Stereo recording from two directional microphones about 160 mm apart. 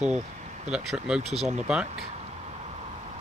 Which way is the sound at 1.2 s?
40° right (ahead or behind).